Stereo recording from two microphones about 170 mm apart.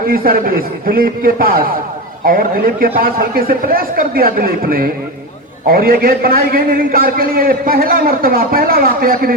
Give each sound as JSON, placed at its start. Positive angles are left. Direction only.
{"t": 0.1, "sound": "a man's voice", "side_deg": -60}